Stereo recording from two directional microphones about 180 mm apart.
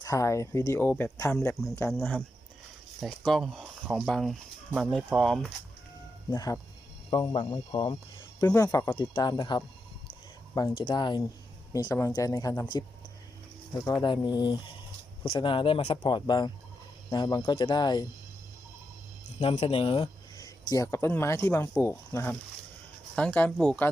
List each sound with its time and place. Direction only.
0.0 s speech: 20° left (ahead or behind)
1.9 s speech: 5° left (ahead or behind)
6.3 s speech: 20° left (ahead or behind)
10.1 s a sound: 20° left (ahead or behind)
10.8 s speech: 25° left (ahead or behind)
19.4 s speech: 30° left (ahead or behind); by 23.9 s 5° left (ahead or behind)